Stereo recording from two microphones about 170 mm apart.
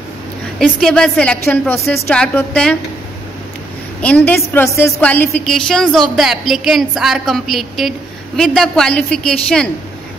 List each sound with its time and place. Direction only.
0.6 s a woman's voice: 5° left (ahead or behind)
4.0 s a woman's voice: 10° left (ahead or behind)